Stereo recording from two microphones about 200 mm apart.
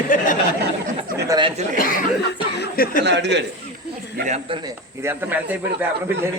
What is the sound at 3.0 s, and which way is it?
Speech, 60° right (ahead or behind).